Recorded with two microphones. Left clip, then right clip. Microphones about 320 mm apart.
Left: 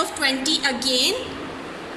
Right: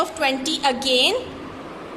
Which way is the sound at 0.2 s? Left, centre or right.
Centre.